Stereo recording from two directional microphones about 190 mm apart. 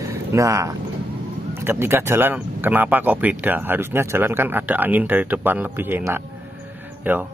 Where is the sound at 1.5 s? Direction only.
10° right (ahead or behind).